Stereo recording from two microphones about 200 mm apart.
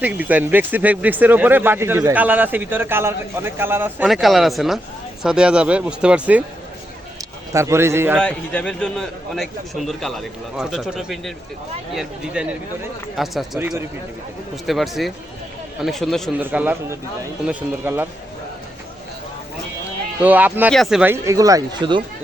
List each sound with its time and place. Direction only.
0.0 s a man's voice: 10° right (ahead or behind)
7.5 s speech: 15° right (ahead or behind)
8.2 s a man's voice: 5° left (ahead or behind); by 13.8 s 10° right (ahead or behind)
14.7 s a man's voice: centre (ahead or behind)
20.2 s speech: 10° right (ahead or behind)